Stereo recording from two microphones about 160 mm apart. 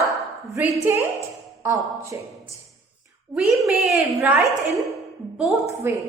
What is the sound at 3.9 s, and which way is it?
Speech, 15° right (ahead or behind).